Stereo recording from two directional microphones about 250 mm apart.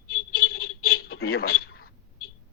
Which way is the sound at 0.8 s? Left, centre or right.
Left.